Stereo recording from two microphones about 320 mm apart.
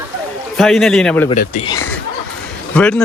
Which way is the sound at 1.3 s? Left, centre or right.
Centre.